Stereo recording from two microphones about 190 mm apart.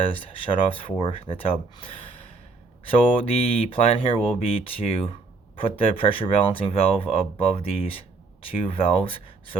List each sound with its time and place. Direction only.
0.0 s speech: 30° left (ahead or behind)
2.9 s speech: 30° left (ahead or behind)